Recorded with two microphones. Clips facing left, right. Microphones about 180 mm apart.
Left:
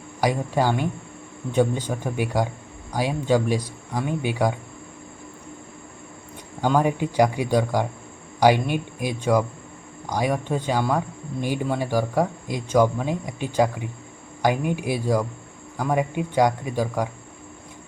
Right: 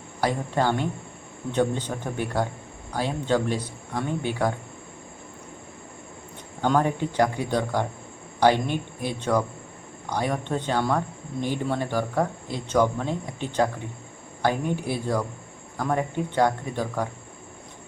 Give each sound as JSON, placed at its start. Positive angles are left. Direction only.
{"t": 0.2, "sound": "speech", "side_deg": 10}
{"t": 6.6, "sound": "speech", "side_deg": 10}